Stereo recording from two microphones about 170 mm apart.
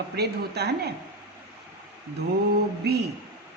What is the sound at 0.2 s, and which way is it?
Speech, 70° right (ahead or behind).